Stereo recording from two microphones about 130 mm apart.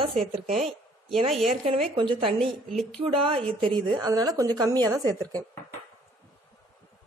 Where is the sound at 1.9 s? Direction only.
40° right (ahead or behind).